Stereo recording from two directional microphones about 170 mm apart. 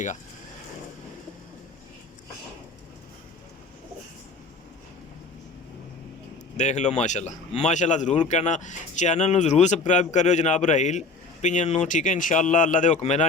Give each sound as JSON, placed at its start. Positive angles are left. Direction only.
{"t": 6.6, "sound": "speech", "side_deg": 45}